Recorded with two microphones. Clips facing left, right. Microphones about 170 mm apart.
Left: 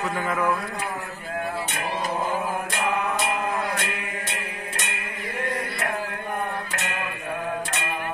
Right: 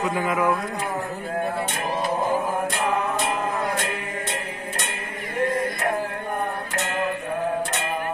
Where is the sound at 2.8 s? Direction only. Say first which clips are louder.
Left 1 dB; 35° right (ahead or behind).